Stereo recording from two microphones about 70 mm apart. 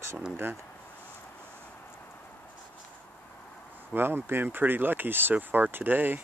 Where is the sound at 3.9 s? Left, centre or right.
Right.